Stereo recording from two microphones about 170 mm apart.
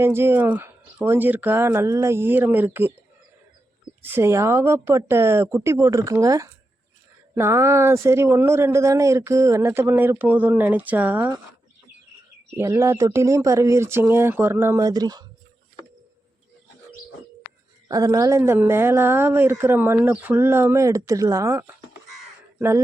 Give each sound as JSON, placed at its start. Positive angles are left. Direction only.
{"t": 0.0, "sound": "speech", "side_deg": -15}
{"t": 4.1, "sound": "speech", "side_deg": -15}
{"t": 12.5, "sound": "speech", "side_deg": -15}
{"t": 17.8, "sound": "speech", "side_deg": -20}